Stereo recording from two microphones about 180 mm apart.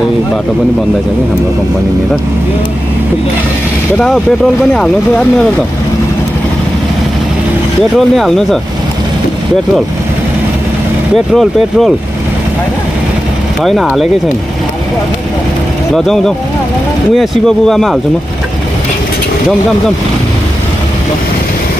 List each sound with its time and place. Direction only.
4.7 s a man's voice: centre (ahead or behind)
8.2 s a man's voice: centre (ahead or behind)
11.1 s a man's voice: centre (ahead or behind)
13.6 s a man's voice: centre (ahead or behind)
15.9 s a man's voice: centre (ahead or behind)